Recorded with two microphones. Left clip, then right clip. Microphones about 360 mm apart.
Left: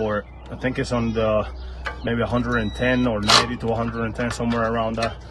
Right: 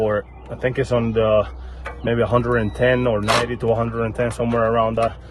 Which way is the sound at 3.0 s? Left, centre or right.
Right.